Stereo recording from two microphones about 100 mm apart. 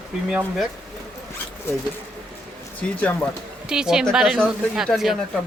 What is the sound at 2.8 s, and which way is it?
Speech, 15° left (ahead or behind).